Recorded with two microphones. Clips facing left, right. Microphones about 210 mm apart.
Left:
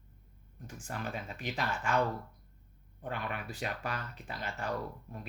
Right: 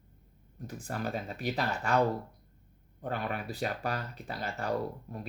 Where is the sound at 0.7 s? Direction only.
35° right (ahead or behind).